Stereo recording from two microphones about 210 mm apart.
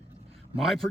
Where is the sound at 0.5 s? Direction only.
Centre (ahead or behind).